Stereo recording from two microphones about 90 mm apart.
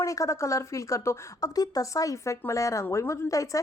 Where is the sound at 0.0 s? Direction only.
35° left (ahead or behind).